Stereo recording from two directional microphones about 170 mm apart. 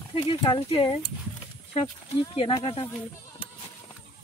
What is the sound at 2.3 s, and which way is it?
Speech, 30° left (ahead or behind).